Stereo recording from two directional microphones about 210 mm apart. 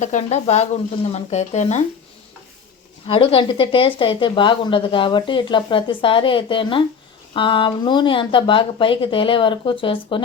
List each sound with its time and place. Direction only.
0.0 s speech: 35° left (ahead or behind)
3.1 s speech: 25° left (ahead or behind)